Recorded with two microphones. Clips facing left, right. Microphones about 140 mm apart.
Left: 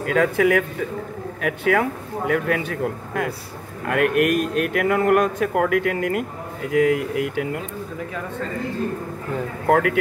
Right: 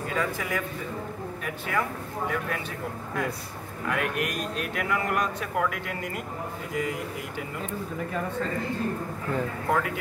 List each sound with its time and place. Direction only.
0.0 s a man's voice: 70° left (ahead or behind)
9.7 s speech: 75° left (ahead or behind)